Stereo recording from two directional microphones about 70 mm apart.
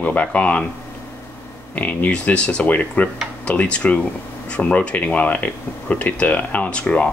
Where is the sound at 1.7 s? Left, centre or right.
Left.